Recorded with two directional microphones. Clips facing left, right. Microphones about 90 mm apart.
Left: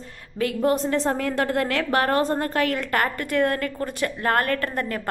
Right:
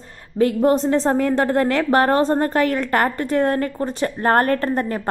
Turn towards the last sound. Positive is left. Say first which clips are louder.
# right 5 dB
turn(degrees=-30)  # may be behind; listen again after turning